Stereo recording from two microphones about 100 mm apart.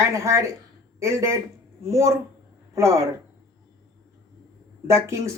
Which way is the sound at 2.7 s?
30° right (ahead or behind).